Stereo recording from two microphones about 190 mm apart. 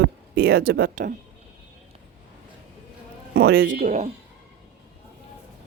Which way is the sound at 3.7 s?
40° right (ahead or behind).